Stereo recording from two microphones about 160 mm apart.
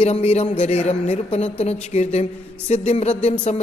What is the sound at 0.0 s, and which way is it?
Speech, 40° left (ahead or behind).